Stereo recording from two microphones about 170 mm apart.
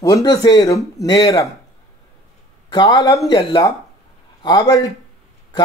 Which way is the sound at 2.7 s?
20° left (ahead or behind).